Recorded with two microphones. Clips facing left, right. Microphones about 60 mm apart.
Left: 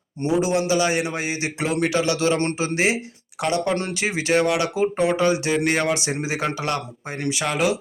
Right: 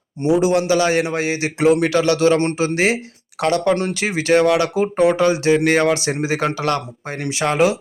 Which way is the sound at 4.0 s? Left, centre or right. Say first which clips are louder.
Right 4 dB; right.